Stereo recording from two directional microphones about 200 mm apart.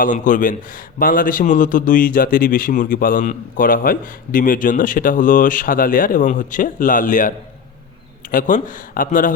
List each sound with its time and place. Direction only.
0.0 s a man's voice: 40° left (ahead or behind)